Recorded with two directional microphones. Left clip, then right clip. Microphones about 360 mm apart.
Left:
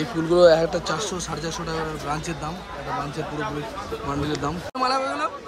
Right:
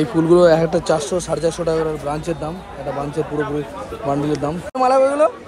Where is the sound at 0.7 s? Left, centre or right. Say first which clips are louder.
Right 8 dB; centre.